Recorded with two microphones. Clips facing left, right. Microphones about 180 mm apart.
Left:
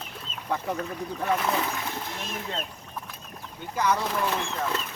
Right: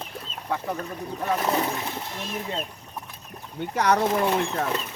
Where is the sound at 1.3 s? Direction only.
35° right (ahead or behind).